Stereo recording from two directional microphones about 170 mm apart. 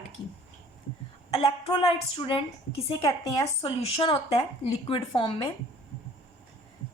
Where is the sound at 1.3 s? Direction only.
35° left (ahead or behind).